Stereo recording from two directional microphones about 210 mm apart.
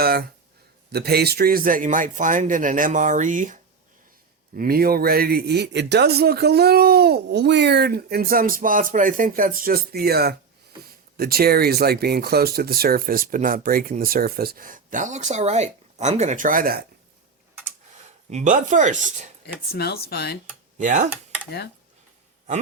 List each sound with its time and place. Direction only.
0.0 s a man's voice: 45° right (ahead or behind)
18.3 s a man's voice: 35° right (ahead or behind)
19.7 s speech: 50° left (ahead or behind)
20.7 s a man's voice: 35° right (ahead or behind)